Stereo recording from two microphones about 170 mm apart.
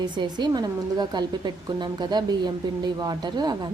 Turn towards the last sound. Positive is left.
turn(degrees=-25)  # may be behind; listen again after turning